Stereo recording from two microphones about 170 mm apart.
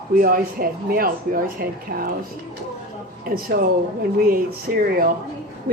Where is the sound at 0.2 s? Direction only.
55° right (ahead or behind).